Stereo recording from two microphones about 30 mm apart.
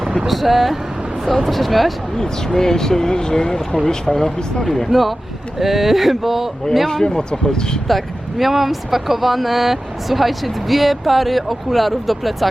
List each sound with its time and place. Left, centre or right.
0.3 s speech: centre
2.1 s speech: centre
3.8 s speech: centre
4.9 s speech: centre
7.0 s speech: left
7.9 s speech: centre